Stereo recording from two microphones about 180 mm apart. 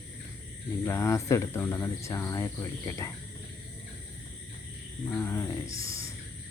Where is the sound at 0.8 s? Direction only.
15° left (ahead or behind).